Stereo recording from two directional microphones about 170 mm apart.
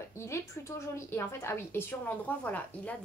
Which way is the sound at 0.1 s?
15° left (ahead or behind).